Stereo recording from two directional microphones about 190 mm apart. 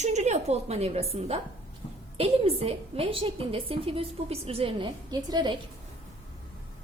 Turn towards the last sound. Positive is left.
turn(degrees=-25)  # may be behind; listen again after turning